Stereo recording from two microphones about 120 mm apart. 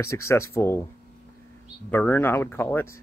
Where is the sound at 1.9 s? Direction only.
15° left (ahead or behind).